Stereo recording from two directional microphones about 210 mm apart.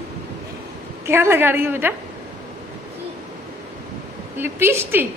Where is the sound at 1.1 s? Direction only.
10° right (ahead or behind).